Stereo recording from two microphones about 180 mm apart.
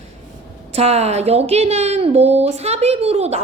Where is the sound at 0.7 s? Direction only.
35° right (ahead or behind).